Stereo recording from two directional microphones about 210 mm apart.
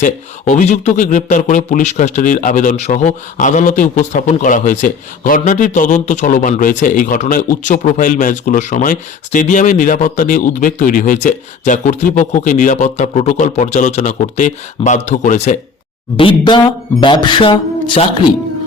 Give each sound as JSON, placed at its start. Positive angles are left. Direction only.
{"t": 0.0, "sound": "speech", "side_deg": 35}
{"t": 16.1, "sound": "speech", "side_deg": 25}